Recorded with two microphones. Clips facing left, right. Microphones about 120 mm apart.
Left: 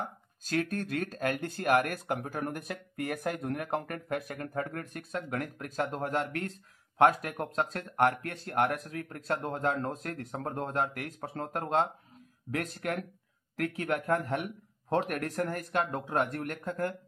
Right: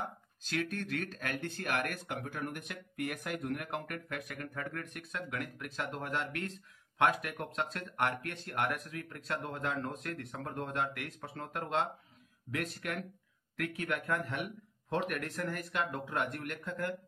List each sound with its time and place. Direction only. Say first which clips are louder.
0.5 s speech: left 4 dB; 40° left (ahead or behind)